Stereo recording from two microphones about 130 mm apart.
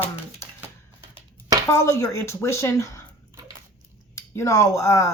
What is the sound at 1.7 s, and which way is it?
Speech, 20° left (ahead or behind).